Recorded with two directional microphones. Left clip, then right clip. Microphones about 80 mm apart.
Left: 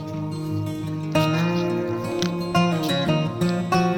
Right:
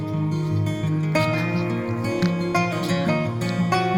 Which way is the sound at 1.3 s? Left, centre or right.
Right.